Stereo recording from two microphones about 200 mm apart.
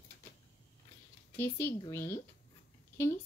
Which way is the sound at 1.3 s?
10° left (ahead or behind).